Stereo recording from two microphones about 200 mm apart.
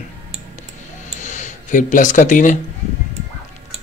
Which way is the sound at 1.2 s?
40° left (ahead or behind).